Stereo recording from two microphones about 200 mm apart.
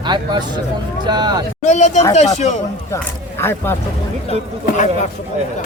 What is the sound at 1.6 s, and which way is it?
Speech, 35° left (ahead or behind).